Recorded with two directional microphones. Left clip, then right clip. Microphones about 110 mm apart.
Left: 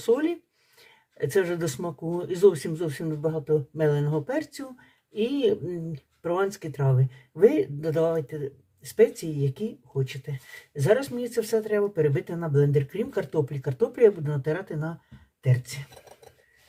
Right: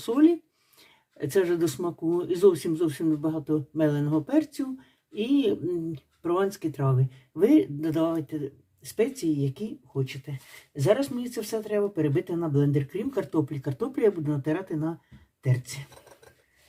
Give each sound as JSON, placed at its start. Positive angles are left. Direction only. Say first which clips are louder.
{"t": 0.0, "sound": "speech", "louder": "right 2 dB", "side_deg": -5}